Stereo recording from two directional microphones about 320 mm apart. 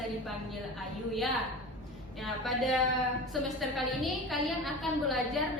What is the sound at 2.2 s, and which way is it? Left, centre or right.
A woman's voice, centre.